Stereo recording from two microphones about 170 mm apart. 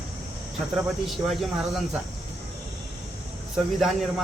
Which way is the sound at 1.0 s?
Centre (ahead or behind).